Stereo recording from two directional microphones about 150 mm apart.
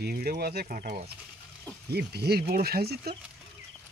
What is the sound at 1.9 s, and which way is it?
Speech, 90° right.